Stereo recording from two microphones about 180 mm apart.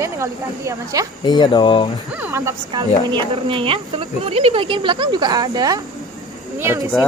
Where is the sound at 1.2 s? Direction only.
25° left (ahead or behind).